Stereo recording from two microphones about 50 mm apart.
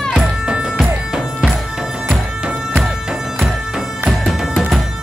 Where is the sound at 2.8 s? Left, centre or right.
Right.